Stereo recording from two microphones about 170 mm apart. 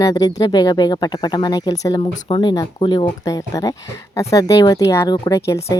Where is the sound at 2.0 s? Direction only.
35° left (ahead or behind).